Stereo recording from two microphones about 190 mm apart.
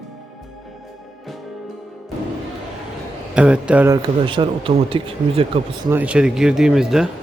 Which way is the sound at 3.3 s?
5° right (ahead or behind).